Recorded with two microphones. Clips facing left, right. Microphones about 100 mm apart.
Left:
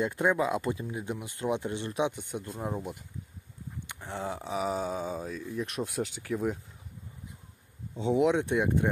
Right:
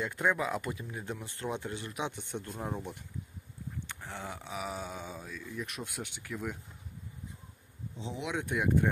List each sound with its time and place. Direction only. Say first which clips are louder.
0.0 s speech: left 4 dB; 25° left (ahead or behind)
2.1 s speech: left 2 dB; 10° left (ahead or behind)
3.8 s speech: left 8 dB; 20° left (ahead or behind)
5.5 s speech: left 6 dB; 25° left (ahead or behind)
8.0 s speech: left 15 dB; 60° left (ahead or behind)
8.3 s speech: left 5 dB; 25° left (ahead or behind)